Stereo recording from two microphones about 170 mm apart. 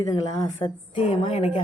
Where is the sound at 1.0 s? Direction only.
40° left (ahead or behind).